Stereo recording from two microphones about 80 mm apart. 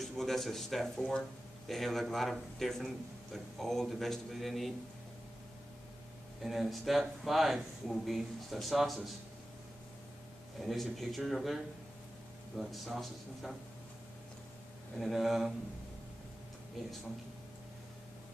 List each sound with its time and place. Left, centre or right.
0.0 s speech: centre
6.4 s speech: centre
10.6 s speech: centre
15.0 s speech: centre